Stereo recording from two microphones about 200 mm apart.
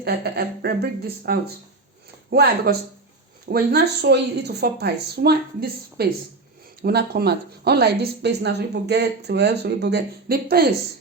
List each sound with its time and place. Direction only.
0.0 s a woman's voice: 55° right (ahead or behind)